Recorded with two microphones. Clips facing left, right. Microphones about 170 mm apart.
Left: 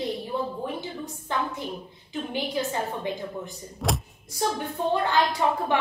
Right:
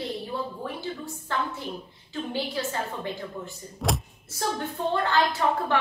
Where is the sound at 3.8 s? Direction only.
Centre (ahead or behind).